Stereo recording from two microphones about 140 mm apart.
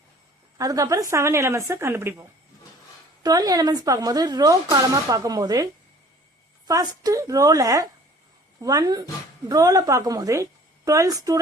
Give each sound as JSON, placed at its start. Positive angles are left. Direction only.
{"t": 0.6, "sound": "speech", "side_deg": -25}
{"t": 3.2, "sound": "speech", "side_deg": -25}
{"t": 6.7, "sound": "speech", "side_deg": -25}